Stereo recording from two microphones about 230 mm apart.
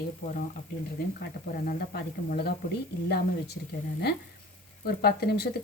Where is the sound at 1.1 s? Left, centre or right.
Left.